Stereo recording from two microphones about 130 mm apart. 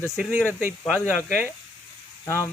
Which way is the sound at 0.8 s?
5° left (ahead or behind).